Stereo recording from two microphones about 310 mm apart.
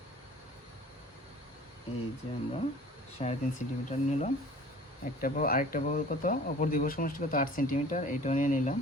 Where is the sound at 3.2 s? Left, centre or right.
Centre.